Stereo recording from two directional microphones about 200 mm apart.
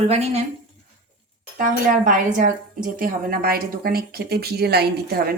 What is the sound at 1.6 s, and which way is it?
A woman's voice, 40° right (ahead or behind).